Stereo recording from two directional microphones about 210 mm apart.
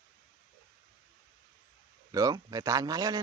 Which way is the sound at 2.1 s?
15° right (ahead or behind).